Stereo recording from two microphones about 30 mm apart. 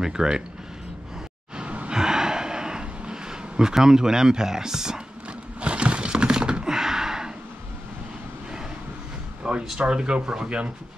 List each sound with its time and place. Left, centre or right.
0.0 s speech: right
1.9 s gasp: right
3.7 s speech: centre
5.6 s a sound: right
9.5 s a sound: right
9.8 s speech: right